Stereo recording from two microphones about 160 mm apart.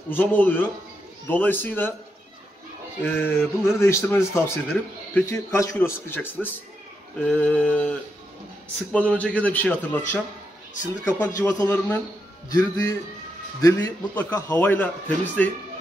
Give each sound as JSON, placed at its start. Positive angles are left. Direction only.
{"t": 0.1, "sound": "speech", "side_deg": 10}
{"t": 3.0, "sound": "speech", "side_deg": 15}
{"t": 8.9, "sound": "speech", "side_deg": 10}
{"t": 12.4, "sound": "a man's voice", "side_deg": 20}